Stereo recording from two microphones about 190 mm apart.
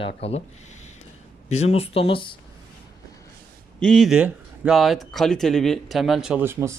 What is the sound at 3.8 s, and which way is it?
Speech, centre (ahead or behind).